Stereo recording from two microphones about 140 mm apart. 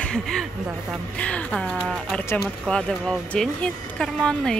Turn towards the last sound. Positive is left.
turn(degrees=5)  # may be behind; listen again after turning